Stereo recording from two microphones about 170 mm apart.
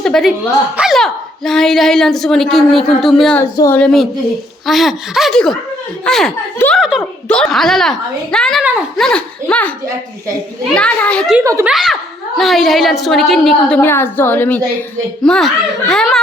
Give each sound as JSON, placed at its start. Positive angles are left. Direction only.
{"t": 0.0, "sound": "speech", "side_deg": 0}
{"t": 3.5, "sound": "a woman's voice", "side_deg": 20}
{"t": 3.8, "sound": "speech", "side_deg": 5}
{"t": 10.8, "sound": "speech", "side_deg": 5}
{"t": 11.3, "sound": "speech", "side_deg": -15}
{"t": 11.7, "sound": "speech", "side_deg": 0}